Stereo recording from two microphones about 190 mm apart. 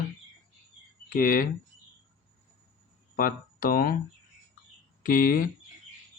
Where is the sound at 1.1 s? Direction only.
50° left (ahead or behind).